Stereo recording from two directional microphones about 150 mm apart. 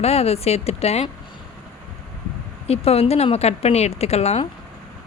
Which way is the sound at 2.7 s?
40° left (ahead or behind).